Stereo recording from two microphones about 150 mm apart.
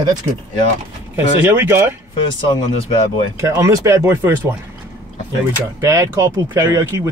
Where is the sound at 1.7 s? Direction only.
15° right (ahead or behind).